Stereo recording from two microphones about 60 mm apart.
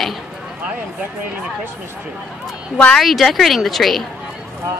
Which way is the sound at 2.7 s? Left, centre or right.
Centre.